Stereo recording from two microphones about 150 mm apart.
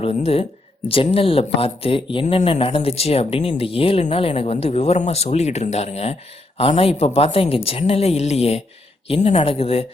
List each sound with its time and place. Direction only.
0.0 s a woman's voice: 40° left (ahead or behind)